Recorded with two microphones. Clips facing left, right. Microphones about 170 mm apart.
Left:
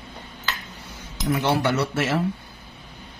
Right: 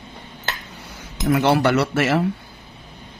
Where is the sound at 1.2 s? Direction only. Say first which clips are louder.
Right 5 dB; 75° right (ahead or behind).